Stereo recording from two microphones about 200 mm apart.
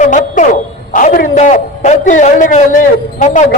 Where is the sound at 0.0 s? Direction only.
40° left (ahead or behind).